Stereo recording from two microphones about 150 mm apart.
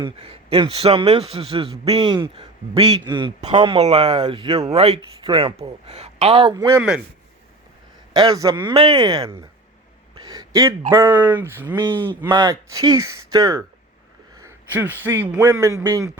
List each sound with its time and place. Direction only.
0.0 s a man's voice: 40° right (ahead or behind)
3.9 s a man's voice: 45° right (ahead or behind)
4.7 s a man's voice: 45° right (ahead or behind)
6.5 s speech: 20° right (ahead or behind)
8.1 s speech: 25° right (ahead or behind)
8.7 s a man's voice: 35° right (ahead or behind); by 16.1 s 20° right (ahead or behind)